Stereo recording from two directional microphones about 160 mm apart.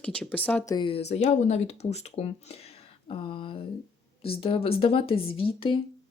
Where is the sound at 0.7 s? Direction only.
30° left (ahead or behind).